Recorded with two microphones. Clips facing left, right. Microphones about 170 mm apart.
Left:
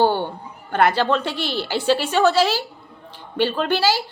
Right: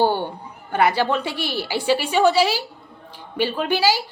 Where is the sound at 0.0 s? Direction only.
15° right (ahead or behind).